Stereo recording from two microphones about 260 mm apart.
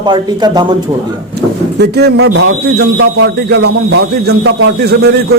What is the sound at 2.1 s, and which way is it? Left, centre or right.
Speech, right.